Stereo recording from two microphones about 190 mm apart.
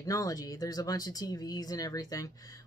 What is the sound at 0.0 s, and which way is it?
Speech, 20° left (ahead or behind).